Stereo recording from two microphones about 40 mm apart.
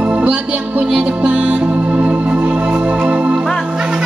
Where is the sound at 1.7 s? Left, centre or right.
Right.